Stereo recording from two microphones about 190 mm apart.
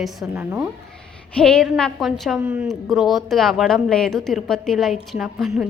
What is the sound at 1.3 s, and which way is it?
A woman's voice, 5° left (ahead or behind).